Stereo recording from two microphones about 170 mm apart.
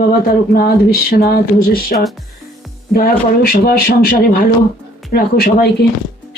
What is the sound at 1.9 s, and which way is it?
Speech, 55° left (ahead or behind).